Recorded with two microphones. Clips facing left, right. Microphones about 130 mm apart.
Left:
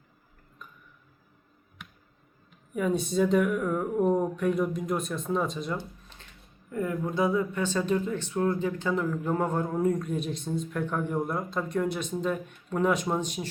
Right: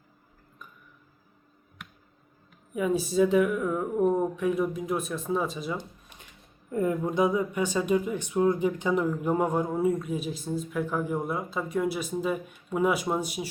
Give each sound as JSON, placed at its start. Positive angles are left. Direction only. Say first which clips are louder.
{"t": 2.7, "sound": "speech", "louder": "right 1 dB", "side_deg": -5}
{"t": 5.7, "sound": "a sound", "louder": "left 1 dB", "side_deg": -15}
{"t": 6.7, "sound": "speech", "louder": "right 3 dB", "side_deg": -25}